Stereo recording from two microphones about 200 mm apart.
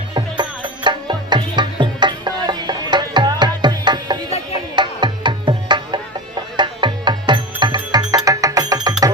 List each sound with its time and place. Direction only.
0.1 s music: 25° right (ahead or behind)